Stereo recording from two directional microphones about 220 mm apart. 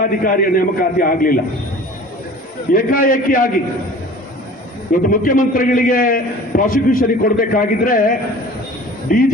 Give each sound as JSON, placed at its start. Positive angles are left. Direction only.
{"t": 0.0, "sound": "a man's voice", "side_deg": 40}
{"t": 2.7, "sound": "a man's voice", "side_deg": 40}
{"t": 5.1, "sound": "a man's voice", "side_deg": 40}